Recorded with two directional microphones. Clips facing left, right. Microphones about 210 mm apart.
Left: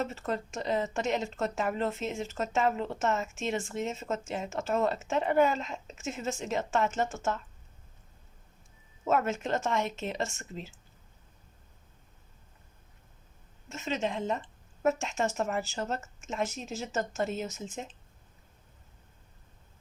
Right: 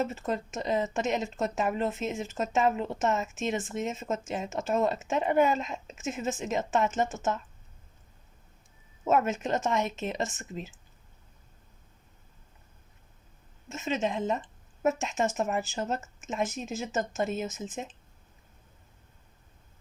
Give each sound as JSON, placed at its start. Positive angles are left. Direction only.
{"t": 0.1, "sound": "speech", "side_deg": -20}
{"t": 9.0, "sound": "speech", "side_deg": -20}
{"t": 13.7, "sound": "speech", "side_deg": -20}